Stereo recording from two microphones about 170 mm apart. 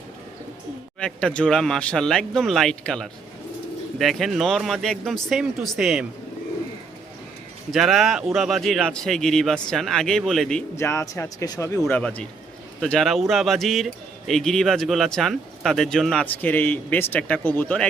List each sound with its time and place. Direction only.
0.9 s speech: 5° left (ahead or behind)
7.7 s speech: centre (ahead or behind)
10.8 s speech: 15° left (ahead or behind)